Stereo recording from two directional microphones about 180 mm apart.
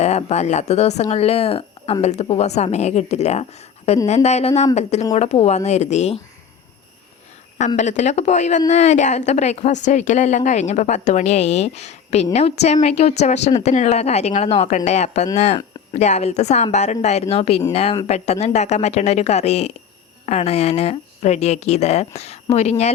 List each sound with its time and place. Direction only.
0.0 s a woman's voice: 35° left (ahead or behind)
7.8 s a woman's voice: 40° left (ahead or behind)